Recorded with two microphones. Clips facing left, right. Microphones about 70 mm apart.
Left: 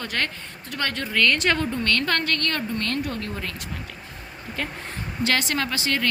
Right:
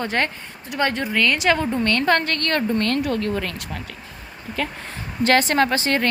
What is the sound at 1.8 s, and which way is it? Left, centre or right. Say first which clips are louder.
Speech: right 6 dB; right.